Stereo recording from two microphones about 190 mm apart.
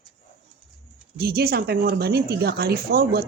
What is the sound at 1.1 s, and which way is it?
A woman's voice, 55° right (ahead or behind).